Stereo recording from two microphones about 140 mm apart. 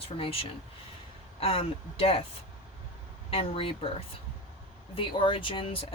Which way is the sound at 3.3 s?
40° left (ahead or behind).